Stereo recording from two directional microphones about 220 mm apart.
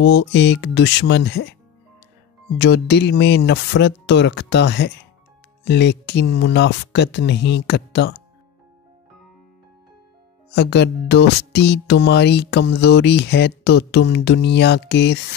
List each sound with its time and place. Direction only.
0.0 s speech: 50° left (ahead or behind)
2.6 s speech: 50° left (ahead or behind)
10.5 s speech: 50° left (ahead or behind)